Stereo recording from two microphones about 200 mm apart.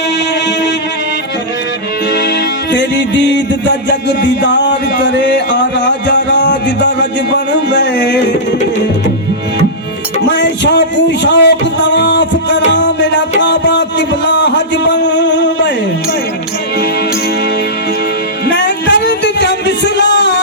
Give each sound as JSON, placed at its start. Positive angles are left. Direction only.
{"t": 2.7, "sound": "music", "side_deg": 60}
{"t": 10.2, "sound": "a sound", "side_deg": 60}
{"t": 18.5, "sound": "music", "side_deg": 60}